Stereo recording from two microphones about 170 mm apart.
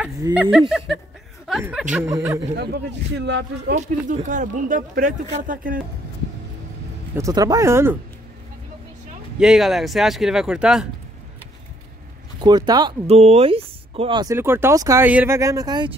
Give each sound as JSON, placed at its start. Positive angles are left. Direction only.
{"t": 0.3, "sound": "speech", "side_deg": -5}
{"t": 2.0, "sound": "speech", "side_deg": -20}
{"t": 2.5, "sound": "a man's voice", "side_deg": -75}
{"t": 4.1, "sound": "speech", "side_deg": -45}
{"t": 7.2, "sound": "speech", "side_deg": -20}
{"t": 9.4, "sound": "speech", "side_deg": 0}
{"t": 12.4, "sound": "speech", "side_deg": -25}
{"t": 13.0, "sound": "speech", "side_deg": -40}
{"t": 14.3, "sound": "speech", "side_deg": -15}